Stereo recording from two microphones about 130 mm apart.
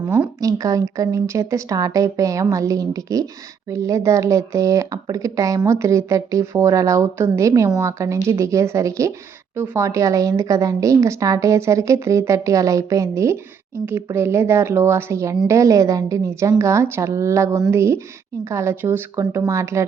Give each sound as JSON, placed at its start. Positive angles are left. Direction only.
{"t": 0.3, "sound": "speech", "side_deg": -25}